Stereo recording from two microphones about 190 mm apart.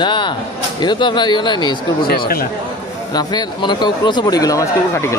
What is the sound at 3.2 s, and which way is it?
Speech, 20° left (ahead or behind).